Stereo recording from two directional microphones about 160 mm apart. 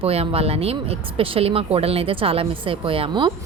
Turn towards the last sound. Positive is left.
turn(degrees=-30)  # may be behind; listen again after turning